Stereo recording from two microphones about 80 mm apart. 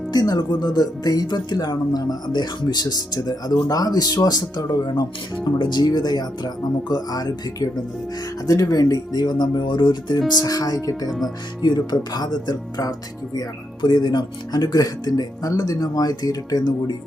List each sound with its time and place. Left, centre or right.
0.1 s speech: left
5.5 s speech: left
10.4 s speech: left
11.6 s speech: left